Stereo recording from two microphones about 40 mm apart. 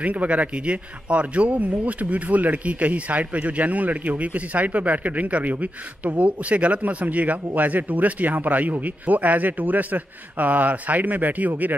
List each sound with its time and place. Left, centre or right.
0.0 s a man's voice: right